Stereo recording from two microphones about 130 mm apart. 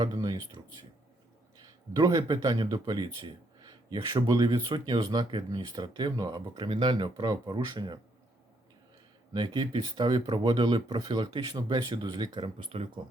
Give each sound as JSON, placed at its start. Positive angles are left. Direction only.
{"t": 0.0, "sound": "speech", "side_deg": -30}
{"t": 2.0, "sound": "speech", "side_deg": -30}
{"t": 9.3, "sound": "speech", "side_deg": -35}